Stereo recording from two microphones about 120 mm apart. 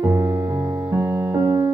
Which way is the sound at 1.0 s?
20° right (ahead or behind).